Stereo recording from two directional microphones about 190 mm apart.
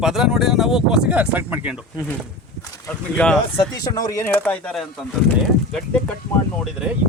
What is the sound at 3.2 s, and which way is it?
Speech, 5° left (ahead or behind).